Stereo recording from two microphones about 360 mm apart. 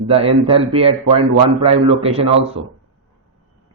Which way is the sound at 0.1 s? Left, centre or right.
Centre.